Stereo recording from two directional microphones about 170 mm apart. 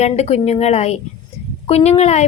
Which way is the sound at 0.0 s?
40° left (ahead or behind).